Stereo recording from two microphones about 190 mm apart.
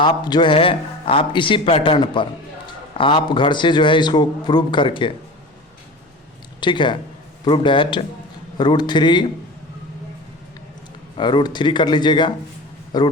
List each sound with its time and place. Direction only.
0.0 s a man's voice: 25° left (ahead or behind)
6.6 s a man's voice: 25° left (ahead or behind)
11.2 s a man's voice: 25° left (ahead or behind)